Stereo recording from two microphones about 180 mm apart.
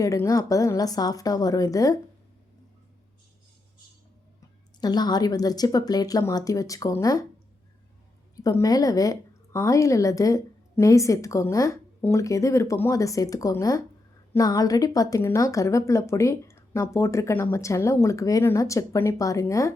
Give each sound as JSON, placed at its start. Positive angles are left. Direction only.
{"t": 0.0, "sound": "a woman's voice", "side_deg": 20}
{"t": 4.8, "sound": "a woman's voice", "side_deg": 25}
{"t": 8.4, "sound": "a woman's voice", "side_deg": 20}